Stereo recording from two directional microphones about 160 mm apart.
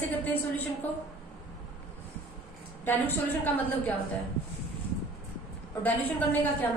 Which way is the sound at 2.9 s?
10° left (ahead or behind).